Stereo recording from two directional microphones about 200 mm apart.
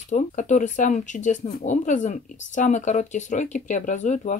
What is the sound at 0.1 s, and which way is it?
Speech, 40° left (ahead or behind).